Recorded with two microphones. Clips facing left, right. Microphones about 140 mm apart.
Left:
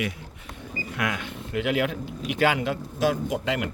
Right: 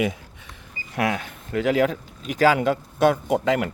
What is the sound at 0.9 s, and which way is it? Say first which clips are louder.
Speech: right 6 dB; 40° right (ahead or behind).